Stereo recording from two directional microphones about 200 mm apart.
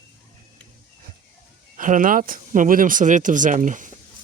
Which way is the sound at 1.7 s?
40° right (ahead or behind).